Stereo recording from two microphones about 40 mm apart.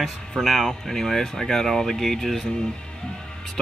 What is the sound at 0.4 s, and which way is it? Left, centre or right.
Speech, centre.